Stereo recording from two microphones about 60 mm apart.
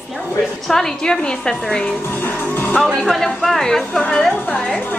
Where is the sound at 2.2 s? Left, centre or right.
Left.